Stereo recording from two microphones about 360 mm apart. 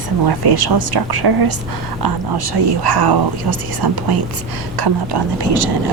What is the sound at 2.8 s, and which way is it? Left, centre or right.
Speech, right.